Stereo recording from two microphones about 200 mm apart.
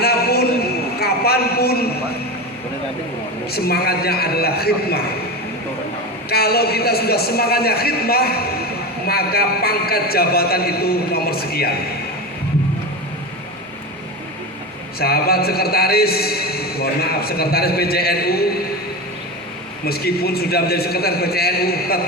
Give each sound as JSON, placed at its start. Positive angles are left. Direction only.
{"t": 0.0, "sound": "a sound", "side_deg": 50}
{"t": 3.5, "sound": "a man's voice", "side_deg": 50}
{"t": 6.3, "sound": "a man's voice", "side_deg": 50}
{"t": 14.9, "sound": "a man's voice", "side_deg": 50}
{"t": 19.8, "sound": "a man's voice", "side_deg": 50}